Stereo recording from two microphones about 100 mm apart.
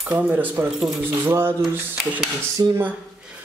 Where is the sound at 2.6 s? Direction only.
45° right (ahead or behind).